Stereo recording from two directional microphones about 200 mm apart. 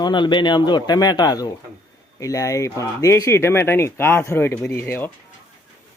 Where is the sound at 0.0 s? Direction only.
25° left (ahead or behind).